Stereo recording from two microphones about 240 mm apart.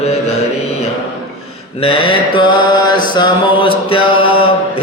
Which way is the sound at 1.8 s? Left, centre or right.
Left.